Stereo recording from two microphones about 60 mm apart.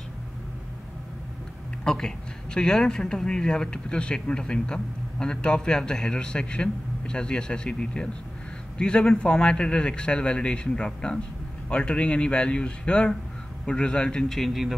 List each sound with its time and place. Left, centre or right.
1.9 s a man's voice: centre
14.4 s speech: centre